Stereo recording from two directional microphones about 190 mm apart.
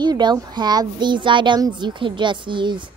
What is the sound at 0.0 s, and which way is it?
Music, 20° right (ahead or behind).